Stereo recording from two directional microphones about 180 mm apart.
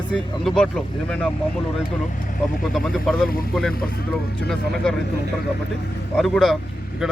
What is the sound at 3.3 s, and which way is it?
Speech, 55° left (ahead or behind).